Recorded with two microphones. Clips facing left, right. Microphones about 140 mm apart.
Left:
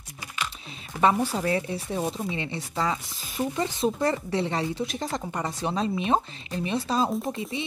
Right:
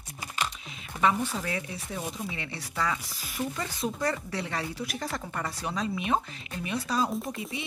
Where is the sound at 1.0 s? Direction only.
35° left (ahead or behind).